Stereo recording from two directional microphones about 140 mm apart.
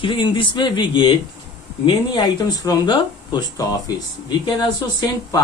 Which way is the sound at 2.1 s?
30° left (ahead or behind).